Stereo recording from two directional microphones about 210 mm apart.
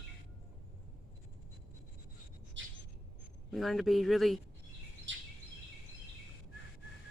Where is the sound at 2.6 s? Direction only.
60° right (ahead or behind).